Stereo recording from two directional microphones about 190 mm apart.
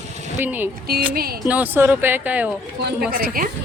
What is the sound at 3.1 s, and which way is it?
Speech, 50° right (ahead or behind).